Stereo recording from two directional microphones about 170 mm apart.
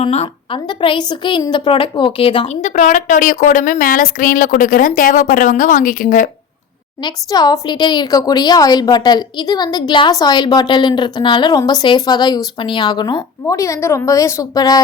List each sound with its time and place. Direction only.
0.0 s a woman's voice: 35° left (ahead or behind)
2.5 s a woman's voice: 45° left (ahead or behind)
7.0 s a woman's voice: 25° left (ahead or behind)